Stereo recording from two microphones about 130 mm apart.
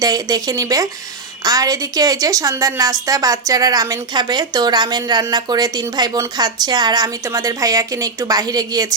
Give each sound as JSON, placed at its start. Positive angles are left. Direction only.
{"t": 0.0, "sound": "a woman's voice", "side_deg": -30}